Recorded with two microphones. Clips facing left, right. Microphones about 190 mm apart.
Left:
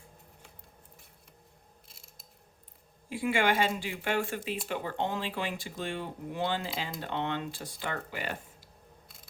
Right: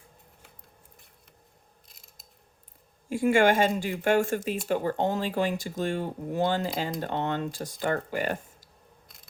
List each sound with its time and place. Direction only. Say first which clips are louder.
3.1 s speech: right 7 dB; 45° right (ahead or behind)